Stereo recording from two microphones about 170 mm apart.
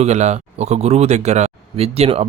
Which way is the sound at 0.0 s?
40° right (ahead or behind).